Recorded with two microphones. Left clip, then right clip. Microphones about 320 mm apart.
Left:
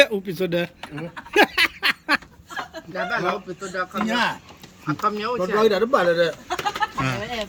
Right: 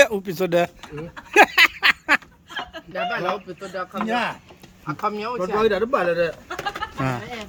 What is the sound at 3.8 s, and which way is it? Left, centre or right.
Speech, centre.